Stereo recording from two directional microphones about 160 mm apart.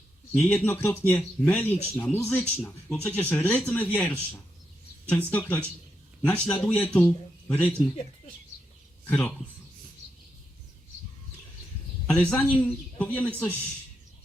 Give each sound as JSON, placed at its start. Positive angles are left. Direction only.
{"t": 0.3, "sound": "speech", "side_deg": 5}
{"t": 2.0, "sound": "speech", "side_deg": 15}
{"t": 9.0, "sound": "a man's voice", "side_deg": 5}
{"t": 12.0, "sound": "speech", "side_deg": 5}